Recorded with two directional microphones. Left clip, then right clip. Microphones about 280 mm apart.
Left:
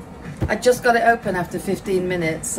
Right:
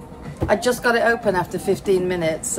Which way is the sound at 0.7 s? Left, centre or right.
Centre.